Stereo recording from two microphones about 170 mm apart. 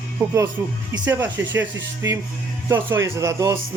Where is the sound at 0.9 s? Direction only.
15° right (ahead or behind).